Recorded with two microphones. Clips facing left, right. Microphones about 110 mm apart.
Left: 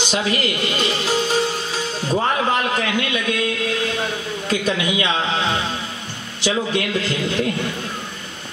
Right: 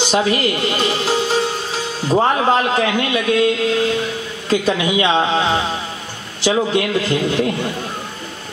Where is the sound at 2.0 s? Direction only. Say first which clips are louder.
Right 5 dB; 30° right (ahead or behind).